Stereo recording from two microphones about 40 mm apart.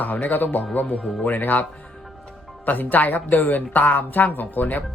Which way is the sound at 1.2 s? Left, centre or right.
Left.